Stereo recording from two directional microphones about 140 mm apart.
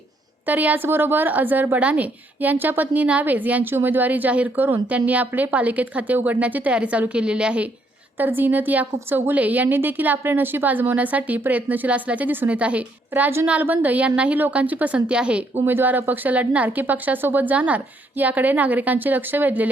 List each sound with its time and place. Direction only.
0.4 s a woman's voice: 10° right (ahead or behind)